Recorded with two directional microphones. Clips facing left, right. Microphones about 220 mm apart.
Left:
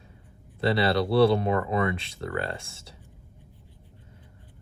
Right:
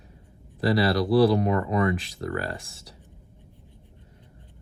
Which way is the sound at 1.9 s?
30° left (ahead or behind).